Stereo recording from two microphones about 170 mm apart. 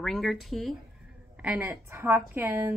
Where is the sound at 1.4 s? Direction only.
10° right (ahead or behind).